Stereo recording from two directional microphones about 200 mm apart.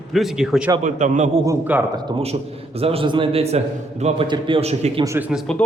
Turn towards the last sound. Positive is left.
turn(degrees=5)  # may be behind; listen again after turning